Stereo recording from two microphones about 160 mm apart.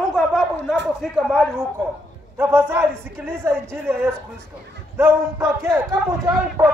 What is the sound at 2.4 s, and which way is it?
A man's voice, 15° right (ahead or behind).